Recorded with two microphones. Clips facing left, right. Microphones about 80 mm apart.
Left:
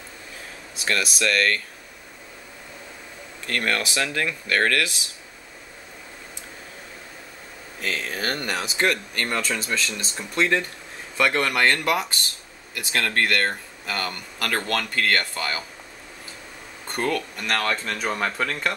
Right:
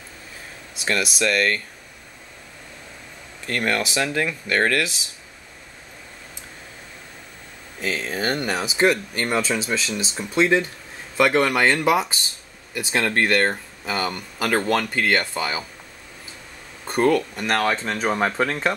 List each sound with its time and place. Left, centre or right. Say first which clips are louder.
0.7 s speech: right 2 dB; centre
3.4 s speech: right 2 dB; centre
7.8 s speech: right 3 dB; centre
16.8 s speech: right 7 dB; centre